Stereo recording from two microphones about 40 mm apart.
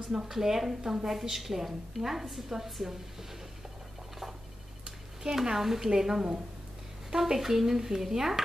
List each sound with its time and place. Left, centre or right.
0.1 s a woman's voice: centre
5.2 s a woman's voice: centre